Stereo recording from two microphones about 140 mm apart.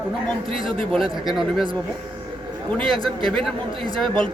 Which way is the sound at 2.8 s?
40° right (ahead or behind).